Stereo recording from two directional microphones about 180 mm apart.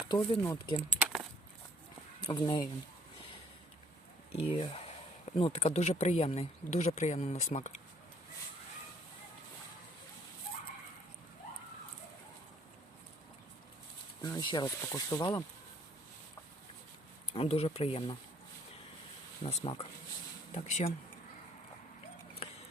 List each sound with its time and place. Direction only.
0.0 s speech: 20° left (ahead or behind)
0.9 s keys jangling: 5° right (ahead or behind)
2.2 s speech: 25° left (ahead or behind)
4.3 s speech: 35° left (ahead or behind)
14.2 s speech: 20° left (ahead or behind)
17.3 s speech: 35° left (ahead or behind)
19.4 s speech: 30° left (ahead or behind)